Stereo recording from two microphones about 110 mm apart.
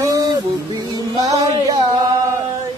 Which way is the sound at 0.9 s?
35° right (ahead or behind).